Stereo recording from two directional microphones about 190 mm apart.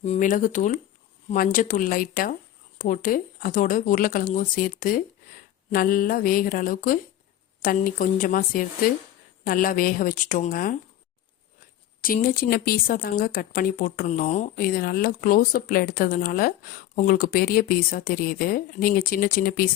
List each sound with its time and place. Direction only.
0.0 s speech: 40° left (ahead or behind)
12.0 s speech: 45° left (ahead or behind)